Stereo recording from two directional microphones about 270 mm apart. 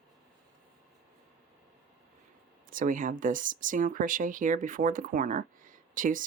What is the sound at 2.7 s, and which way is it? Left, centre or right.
Speech, right.